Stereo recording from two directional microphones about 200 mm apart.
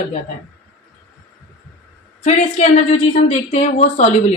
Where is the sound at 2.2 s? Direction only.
35° left (ahead or behind).